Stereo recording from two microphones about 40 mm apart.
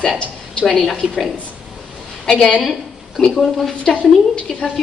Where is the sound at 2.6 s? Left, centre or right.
Centre.